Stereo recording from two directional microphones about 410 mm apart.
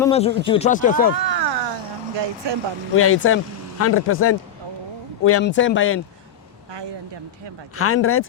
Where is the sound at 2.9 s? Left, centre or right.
Left.